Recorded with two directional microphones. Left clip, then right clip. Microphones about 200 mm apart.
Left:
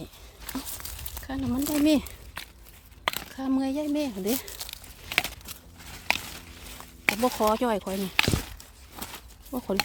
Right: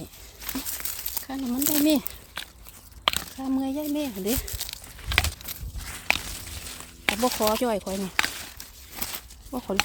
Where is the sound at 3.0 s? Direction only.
15° right (ahead or behind).